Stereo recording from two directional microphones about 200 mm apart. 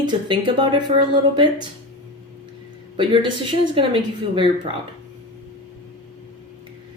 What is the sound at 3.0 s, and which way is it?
Speech, 25° right (ahead or behind).